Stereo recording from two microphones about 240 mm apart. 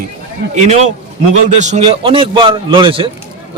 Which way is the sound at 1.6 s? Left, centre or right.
Right.